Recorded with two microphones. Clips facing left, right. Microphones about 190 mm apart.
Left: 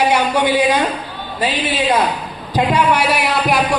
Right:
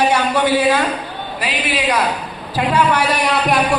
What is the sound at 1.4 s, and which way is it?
Speech, 25° left (ahead or behind).